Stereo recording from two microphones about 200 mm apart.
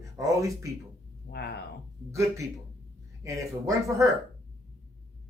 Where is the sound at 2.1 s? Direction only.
15° right (ahead or behind).